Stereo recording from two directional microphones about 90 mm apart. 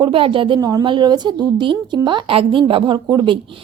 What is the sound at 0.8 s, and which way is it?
A woman's voice, 60° right (ahead or behind).